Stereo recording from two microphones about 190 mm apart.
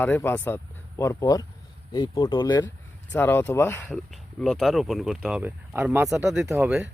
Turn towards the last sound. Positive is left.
turn(degrees=-10)  # may be behind; listen again after turning